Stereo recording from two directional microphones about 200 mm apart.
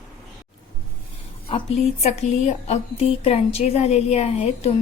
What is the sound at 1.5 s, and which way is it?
Speech, 30° left (ahead or behind).